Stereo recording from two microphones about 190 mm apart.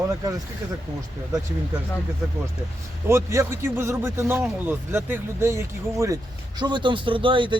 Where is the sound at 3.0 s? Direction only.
15° right (ahead or behind).